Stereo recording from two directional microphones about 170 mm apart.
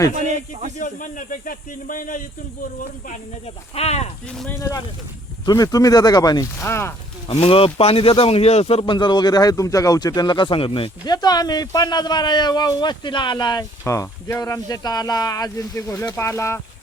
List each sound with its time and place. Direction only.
0.2 s a sound: 45° right (ahead or behind)
0.8 s speech: 50° left (ahead or behind)
3.1 s speech: 40° left (ahead or behind)
4.3 s speech: 5° left (ahead or behind)
5.5 s speech: 20° left (ahead or behind)
7.3 s speech: 35° left (ahead or behind); by 16.6 s 15° left (ahead or behind)